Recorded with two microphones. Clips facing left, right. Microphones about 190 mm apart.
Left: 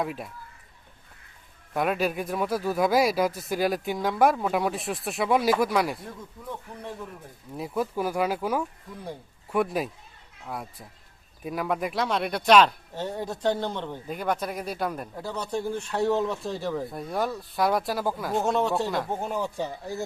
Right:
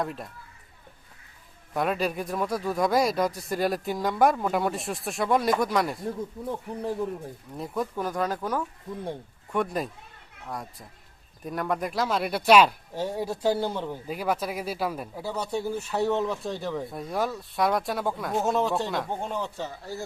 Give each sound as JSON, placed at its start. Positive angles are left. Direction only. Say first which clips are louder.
{"t": 0.0, "sound": "speech", "louder": "left 1 dB", "side_deg": 5}
{"t": 1.7, "sound": "speech", "louder": "left 1 dB", "side_deg": 0}
{"t": 6.4, "sound": "speech", "louder": "right 4 dB", "side_deg": -35}
{"t": 7.5, "sound": "speech", "louder": "left 2 dB", "side_deg": 5}